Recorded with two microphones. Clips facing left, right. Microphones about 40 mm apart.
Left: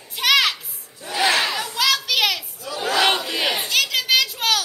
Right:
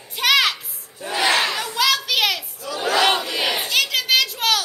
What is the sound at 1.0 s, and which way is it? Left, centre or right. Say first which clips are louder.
Battle cry: right 3 dB; right.